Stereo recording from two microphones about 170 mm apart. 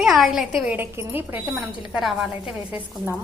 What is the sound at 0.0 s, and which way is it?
A woman's voice, centre (ahead or behind).